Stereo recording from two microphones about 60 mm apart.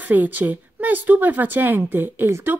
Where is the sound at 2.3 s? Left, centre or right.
Right.